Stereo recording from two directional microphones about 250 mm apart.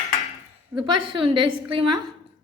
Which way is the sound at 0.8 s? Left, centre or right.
Centre.